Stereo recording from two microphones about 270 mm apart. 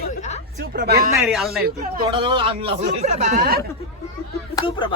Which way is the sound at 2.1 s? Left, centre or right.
Centre.